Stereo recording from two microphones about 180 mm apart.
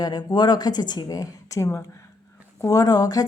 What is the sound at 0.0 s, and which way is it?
A woman's voice, 25° left (ahead or behind).